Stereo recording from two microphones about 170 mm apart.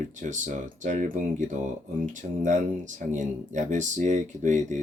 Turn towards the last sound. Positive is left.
turn(degrees=-45)  # may be behind; listen again after turning